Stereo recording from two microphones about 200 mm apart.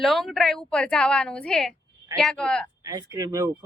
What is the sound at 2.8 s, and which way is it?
Speech, 20° right (ahead or behind).